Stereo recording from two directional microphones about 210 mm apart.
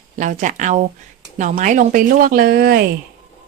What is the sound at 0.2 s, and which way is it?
Speech, 35° right (ahead or behind).